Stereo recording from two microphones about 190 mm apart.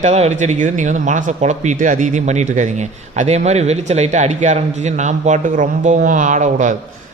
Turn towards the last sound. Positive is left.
turn(degrees=-40)  # may be behind; listen again after turning